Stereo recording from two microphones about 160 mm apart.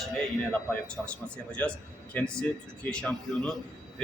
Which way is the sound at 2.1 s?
5° left (ahead or behind).